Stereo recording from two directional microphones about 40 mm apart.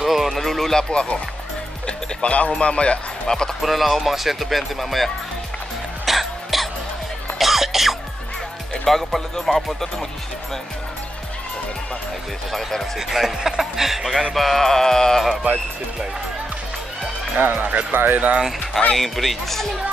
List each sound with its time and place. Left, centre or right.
0.0 s music: centre
0.4 s speech: centre
0.8 s speech: left
3.3 s speech: centre
3.6 s speech: centre
6.0 s music: centre
8.8 s speech: centre
12.5 s speech: centre
17.4 s speech: right
17.9 s speech: right
18.9 s speech: centre